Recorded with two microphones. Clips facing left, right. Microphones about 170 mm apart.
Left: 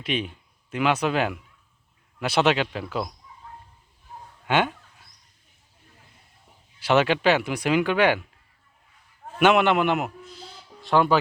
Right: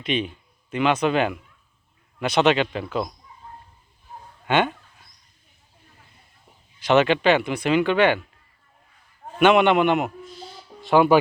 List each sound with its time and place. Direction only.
0.0 s speech: 5° left (ahead or behind)
4.4 s speech: 5° left (ahead or behind)
6.7 s speech: 5° left (ahead or behind)
9.4 s speech: 5° left (ahead or behind)